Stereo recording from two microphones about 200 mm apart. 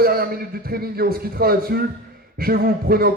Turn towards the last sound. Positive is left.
turn(degrees=-50)  # may be behind; listen again after turning